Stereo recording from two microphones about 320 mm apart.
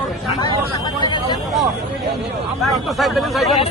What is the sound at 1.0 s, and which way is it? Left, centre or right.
Speech, centre.